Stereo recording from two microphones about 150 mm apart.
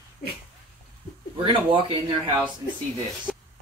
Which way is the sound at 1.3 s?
35° right (ahead or behind).